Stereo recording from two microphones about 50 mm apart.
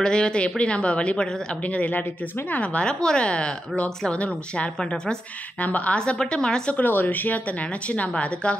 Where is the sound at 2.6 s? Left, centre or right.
Left.